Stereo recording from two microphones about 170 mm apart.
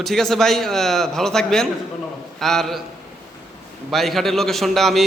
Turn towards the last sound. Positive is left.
turn(degrees=0)  # may be behind; listen again after turning